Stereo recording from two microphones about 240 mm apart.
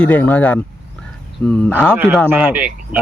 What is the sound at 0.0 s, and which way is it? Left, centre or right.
A man's voice, centre.